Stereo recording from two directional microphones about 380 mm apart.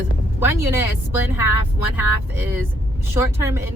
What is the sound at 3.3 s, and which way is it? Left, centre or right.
Speech, centre.